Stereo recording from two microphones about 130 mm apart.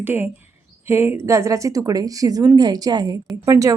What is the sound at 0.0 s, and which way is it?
A woman's voice, 15° right (ahead or behind).